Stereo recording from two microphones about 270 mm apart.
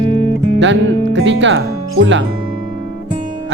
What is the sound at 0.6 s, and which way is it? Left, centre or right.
Speech, right.